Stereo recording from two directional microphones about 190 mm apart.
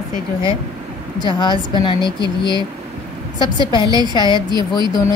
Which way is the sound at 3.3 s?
25° left (ahead or behind).